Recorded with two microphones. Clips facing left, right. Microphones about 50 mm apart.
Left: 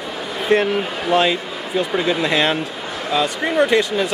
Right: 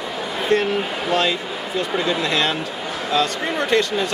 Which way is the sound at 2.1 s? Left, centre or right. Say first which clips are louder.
Left 3 dB; centre.